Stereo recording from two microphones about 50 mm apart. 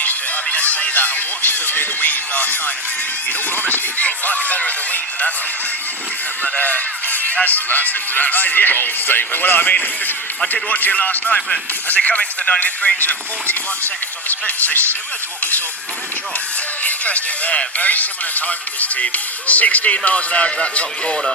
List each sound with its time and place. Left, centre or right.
0.0 s speech: left
6.4 s music: left
7.4 s speech: left
11.3 s speech: centre; by 14.8 s left
16.8 s speech: left